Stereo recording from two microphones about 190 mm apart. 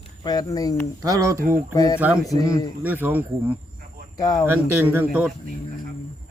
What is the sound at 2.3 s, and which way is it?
Speech, 20° left (ahead or behind).